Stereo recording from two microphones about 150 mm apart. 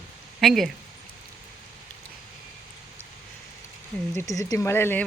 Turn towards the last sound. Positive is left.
turn(degrees=15)  # may be behind; listen again after turning